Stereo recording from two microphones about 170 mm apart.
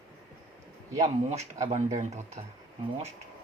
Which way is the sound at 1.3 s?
40° right (ahead or behind).